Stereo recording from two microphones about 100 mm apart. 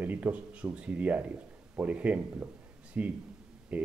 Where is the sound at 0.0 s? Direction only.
15° right (ahead or behind).